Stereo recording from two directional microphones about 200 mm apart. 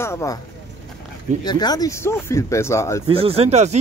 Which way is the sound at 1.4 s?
20° left (ahead or behind).